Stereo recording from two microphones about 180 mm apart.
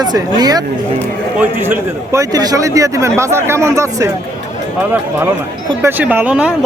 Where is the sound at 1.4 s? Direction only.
10° right (ahead or behind).